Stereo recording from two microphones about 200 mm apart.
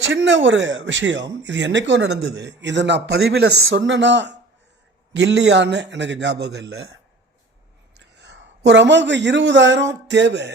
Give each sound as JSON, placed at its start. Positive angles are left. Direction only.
{"t": 0.0, "sound": "speech", "side_deg": -65}
{"t": 7.9, "sound": "a man's voice", "side_deg": -60}